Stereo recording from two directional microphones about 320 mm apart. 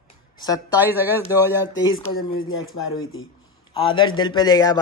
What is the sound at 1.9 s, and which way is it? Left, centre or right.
Speech, left.